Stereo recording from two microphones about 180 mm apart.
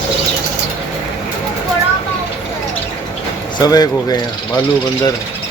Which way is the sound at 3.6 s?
20° left (ahead or behind).